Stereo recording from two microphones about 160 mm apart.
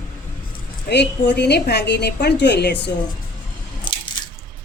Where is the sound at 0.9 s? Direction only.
90° left.